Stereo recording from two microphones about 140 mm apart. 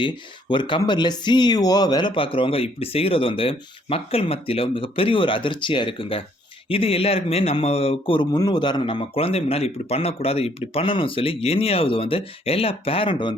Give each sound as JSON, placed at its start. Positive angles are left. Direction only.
{"t": 0.0, "sound": "a man's voice", "side_deg": 35}